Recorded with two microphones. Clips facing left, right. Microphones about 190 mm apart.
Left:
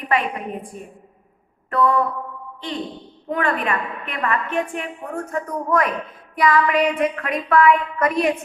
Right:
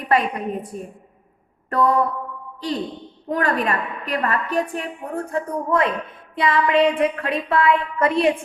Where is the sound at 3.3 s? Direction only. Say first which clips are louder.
Right 1 dB; 40° right (ahead or behind).